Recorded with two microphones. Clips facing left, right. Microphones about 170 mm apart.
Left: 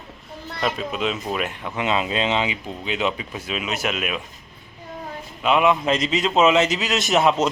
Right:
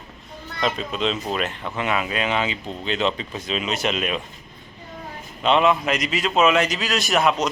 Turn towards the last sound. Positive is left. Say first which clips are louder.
# left 2 dB
turn(degrees=25)  # may be behind; listen again after turning